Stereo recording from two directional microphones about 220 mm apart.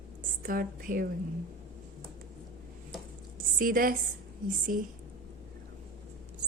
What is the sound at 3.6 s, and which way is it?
A woman's voice, 40° right (ahead or behind).